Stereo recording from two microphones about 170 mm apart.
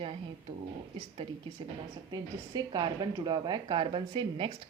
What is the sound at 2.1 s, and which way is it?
A woman's voice, 25° right (ahead or behind).